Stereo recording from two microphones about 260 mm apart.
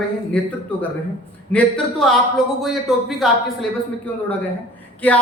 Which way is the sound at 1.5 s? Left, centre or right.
Centre.